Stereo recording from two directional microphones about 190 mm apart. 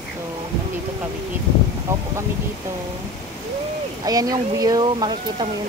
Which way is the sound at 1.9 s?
15° right (ahead or behind).